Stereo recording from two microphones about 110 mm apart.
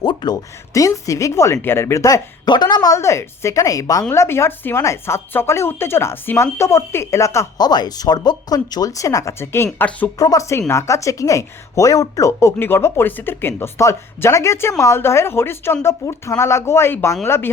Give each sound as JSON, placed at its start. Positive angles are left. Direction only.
{"t": 0.0, "sound": "speech", "side_deg": 40}
{"t": 0.7, "sound": "speech", "side_deg": 30}
{"t": 2.5, "sound": "speech", "side_deg": 40}
{"t": 10.2, "sound": "speech", "side_deg": 30}